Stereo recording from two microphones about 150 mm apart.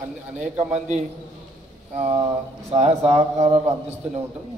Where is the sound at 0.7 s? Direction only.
50° right (ahead or behind).